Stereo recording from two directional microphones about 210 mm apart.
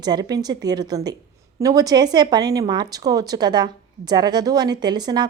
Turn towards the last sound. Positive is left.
turn(degrees=-20)  # may be behind; listen again after turning